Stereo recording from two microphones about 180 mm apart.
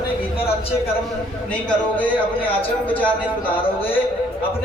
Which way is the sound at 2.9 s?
10° left (ahead or behind).